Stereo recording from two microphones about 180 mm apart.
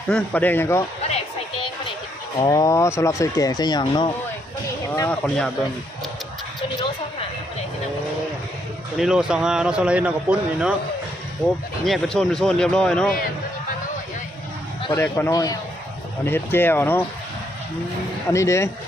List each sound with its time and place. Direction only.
0.1 s speech: 5° left (ahead or behind)
2.5 s speech: 20° left (ahead or behind)
5.0 s speech: 5° left (ahead or behind)
9.0 s speech: 5° right (ahead or behind)
14.8 s a sound: 25° left (ahead or behind)
15.0 s speech: 10° left (ahead or behind)
15.3 s speech: 20° left (ahead or behind)
18.3 s speech: 15° left (ahead or behind)